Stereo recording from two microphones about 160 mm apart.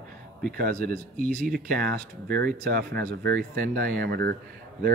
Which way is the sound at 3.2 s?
75° right (ahead or behind).